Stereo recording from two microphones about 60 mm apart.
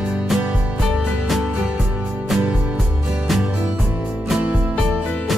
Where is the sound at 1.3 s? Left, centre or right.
Centre.